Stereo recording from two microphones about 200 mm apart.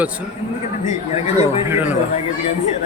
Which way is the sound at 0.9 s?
35° left (ahead or behind).